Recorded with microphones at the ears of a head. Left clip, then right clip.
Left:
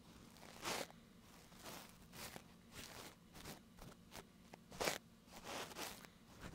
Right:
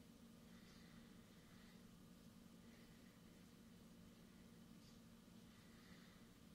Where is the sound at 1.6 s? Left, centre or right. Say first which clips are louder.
Left 11 dB; left.